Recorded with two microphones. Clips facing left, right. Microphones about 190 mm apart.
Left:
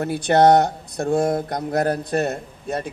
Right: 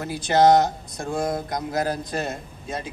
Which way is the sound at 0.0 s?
60° left (ahead or behind).